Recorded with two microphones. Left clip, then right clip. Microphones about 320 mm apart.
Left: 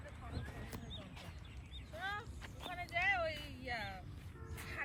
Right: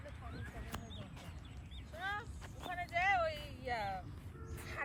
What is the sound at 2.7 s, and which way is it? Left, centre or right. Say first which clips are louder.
Vehicle: right 3 dB; centre.